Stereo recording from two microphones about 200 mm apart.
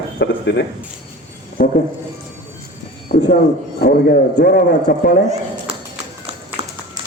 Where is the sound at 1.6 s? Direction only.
45° left (ahead or behind).